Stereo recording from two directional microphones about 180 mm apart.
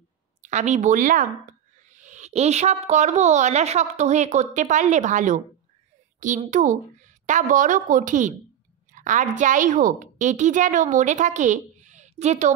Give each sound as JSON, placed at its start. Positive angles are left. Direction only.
{"t": 0.4, "sound": "a woman's voice", "side_deg": -40}
{"t": 6.1, "sound": "a sound", "side_deg": -45}
{"t": 6.5, "sound": "a woman's voice", "side_deg": -45}